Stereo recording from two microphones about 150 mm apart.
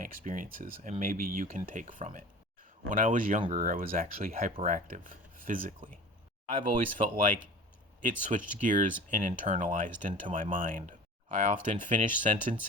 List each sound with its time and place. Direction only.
0.0 s speech: 65° right (ahead or behind)